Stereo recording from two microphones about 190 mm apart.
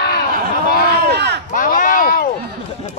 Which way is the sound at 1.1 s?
60° right (ahead or behind).